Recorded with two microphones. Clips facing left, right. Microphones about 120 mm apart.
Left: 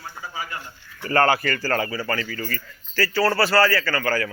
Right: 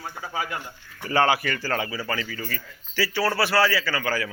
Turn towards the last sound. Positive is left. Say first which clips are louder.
# left 3 dB
turn(degrees=-5)  # may be behind; listen again after turning